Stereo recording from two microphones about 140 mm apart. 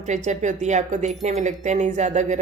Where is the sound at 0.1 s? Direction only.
60° right (ahead or behind).